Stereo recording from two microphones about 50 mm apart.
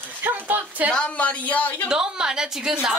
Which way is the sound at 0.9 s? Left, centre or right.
Left.